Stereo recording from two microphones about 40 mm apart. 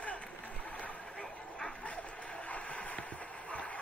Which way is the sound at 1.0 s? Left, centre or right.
Left.